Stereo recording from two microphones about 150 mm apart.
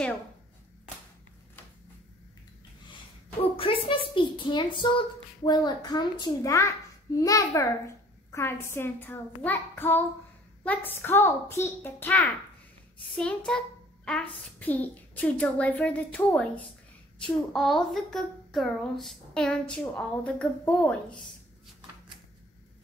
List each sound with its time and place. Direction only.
3.5 s a woman's voice: 35° left (ahead or behind); by 13.4 s 5° left (ahead or behind)
13.5 s a sound: 5° left (ahead or behind)
14.6 s a woman's voice: 10° left (ahead or behind)